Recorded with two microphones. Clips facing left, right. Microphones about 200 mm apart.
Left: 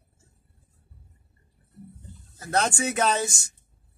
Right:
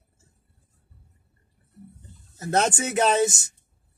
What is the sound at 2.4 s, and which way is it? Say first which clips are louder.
Speech: right 2 dB; 20° right (ahead or behind).